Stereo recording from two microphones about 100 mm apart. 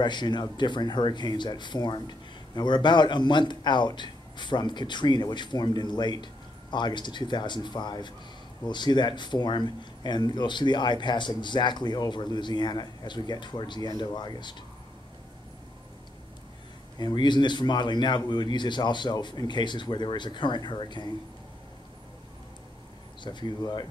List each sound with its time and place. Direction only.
0.0 s speech: 50° left (ahead or behind)
17.0 s speech: 50° left (ahead or behind)
23.2 s speech: 50° left (ahead or behind)